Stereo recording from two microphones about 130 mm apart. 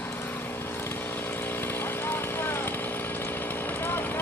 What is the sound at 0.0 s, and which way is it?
Chainsaw, 15° left (ahead or behind).